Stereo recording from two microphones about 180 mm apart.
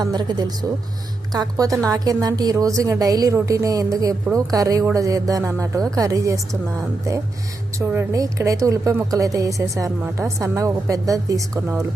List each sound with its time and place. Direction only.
0.0 s speech: 20° right (ahead or behind)
7.8 s speech: 15° right (ahead or behind)